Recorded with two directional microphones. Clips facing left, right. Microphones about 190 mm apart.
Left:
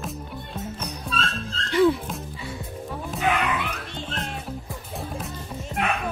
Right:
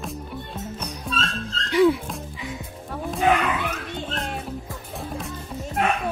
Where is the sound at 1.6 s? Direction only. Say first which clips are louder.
Right 1 dB; 10° right (ahead or behind).